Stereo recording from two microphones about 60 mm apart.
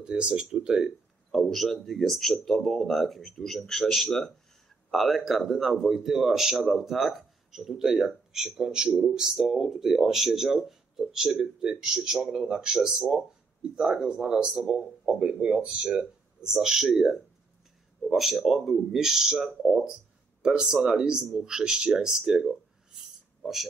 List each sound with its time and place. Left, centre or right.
0.0 s speech: centre
1.3 s speech: centre
16.5 s speech: centre